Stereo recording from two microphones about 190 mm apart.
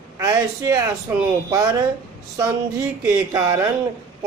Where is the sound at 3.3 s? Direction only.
15° right (ahead or behind).